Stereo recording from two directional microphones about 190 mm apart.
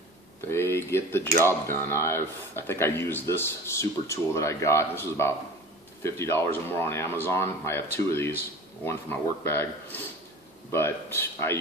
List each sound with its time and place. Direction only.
0.5 s speech: 15° left (ahead or behind)